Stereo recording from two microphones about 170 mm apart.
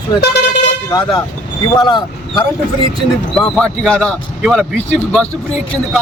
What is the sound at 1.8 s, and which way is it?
Speech, 25° left (ahead or behind).